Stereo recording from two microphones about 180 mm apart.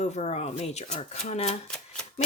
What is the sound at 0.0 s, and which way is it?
Speech, 40° left (ahead or behind).